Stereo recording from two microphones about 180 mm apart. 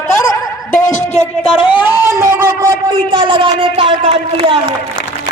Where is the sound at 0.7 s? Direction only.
15° left (ahead or behind).